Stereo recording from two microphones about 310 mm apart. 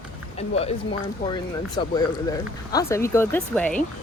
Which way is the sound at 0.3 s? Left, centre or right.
Centre.